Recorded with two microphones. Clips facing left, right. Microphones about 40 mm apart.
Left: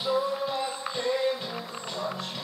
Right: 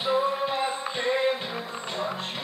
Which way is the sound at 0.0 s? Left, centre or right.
Right.